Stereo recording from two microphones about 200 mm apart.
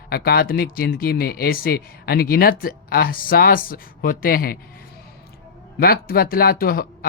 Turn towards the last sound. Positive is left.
turn(degrees=50)  # may be behind; listen again after turning